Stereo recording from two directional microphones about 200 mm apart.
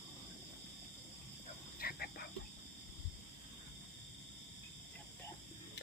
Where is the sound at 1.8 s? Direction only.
50° left (ahead or behind).